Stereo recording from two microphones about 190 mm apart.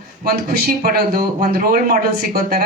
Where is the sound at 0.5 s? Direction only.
55° right (ahead or behind).